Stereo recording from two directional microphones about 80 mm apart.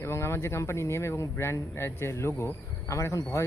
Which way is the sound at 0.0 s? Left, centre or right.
Left.